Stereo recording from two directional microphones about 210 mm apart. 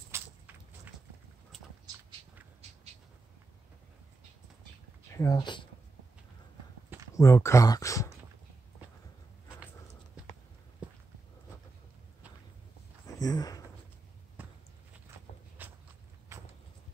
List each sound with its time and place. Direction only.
0.1 s vehicle: 10° right (ahead or behind)
5.1 s speech: 15° left (ahead or behind)
7.2 s speech: 15° left (ahead or behind)
13.0 s a sound: 15° left (ahead or behind)
15.6 s walk: 10° right (ahead or behind)